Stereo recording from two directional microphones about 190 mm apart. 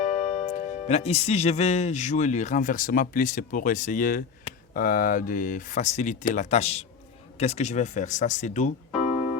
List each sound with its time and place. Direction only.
0.3 s speech: 40° left (ahead or behind)